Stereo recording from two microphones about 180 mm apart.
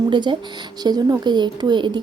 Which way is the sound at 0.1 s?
25° right (ahead or behind).